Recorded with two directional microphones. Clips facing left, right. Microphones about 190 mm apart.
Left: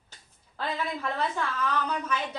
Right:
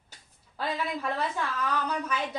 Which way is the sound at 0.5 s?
10° right (ahead or behind).